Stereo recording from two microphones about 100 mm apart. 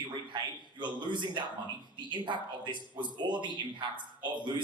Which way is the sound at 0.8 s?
50° right (ahead or behind).